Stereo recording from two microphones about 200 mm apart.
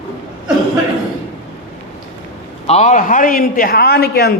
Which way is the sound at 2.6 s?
35° left (ahead or behind).